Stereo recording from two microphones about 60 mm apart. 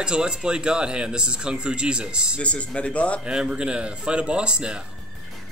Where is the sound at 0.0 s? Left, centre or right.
Centre.